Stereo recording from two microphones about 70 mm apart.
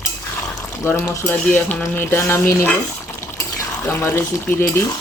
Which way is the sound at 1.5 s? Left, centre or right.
Left.